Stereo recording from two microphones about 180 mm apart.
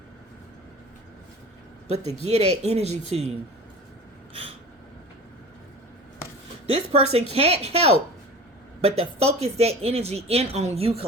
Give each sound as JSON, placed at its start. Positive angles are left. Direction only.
{"t": 2.2, "sound": "speech", "side_deg": -35}
{"t": 6.7, "sound": "speech", "side_deg": -35}